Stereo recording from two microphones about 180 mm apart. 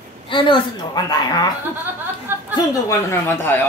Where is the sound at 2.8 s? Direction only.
10° left (ahead or behind).